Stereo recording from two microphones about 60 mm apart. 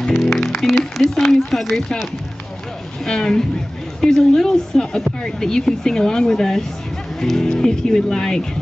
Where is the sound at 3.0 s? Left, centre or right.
Centre.